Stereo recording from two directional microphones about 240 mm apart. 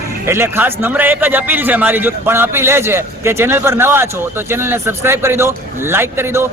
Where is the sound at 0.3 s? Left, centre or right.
Centre.